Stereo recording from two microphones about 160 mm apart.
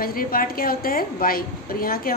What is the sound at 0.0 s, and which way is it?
A woman's voice, 65° left (ahead or behind).